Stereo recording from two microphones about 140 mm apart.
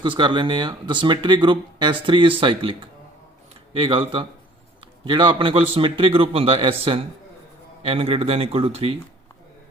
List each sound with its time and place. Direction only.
0.0 s speech: 35° right (ahead or behind)